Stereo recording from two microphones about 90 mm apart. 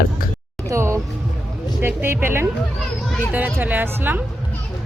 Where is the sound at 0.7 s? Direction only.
30° right (ahead or behind).